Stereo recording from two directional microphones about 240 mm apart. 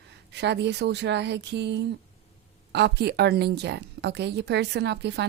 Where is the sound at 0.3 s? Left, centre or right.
Right.